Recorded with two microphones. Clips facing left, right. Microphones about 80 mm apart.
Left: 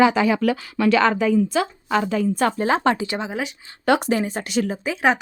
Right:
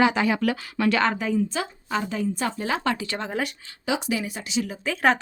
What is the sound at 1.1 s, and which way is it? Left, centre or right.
A woman's voice, left.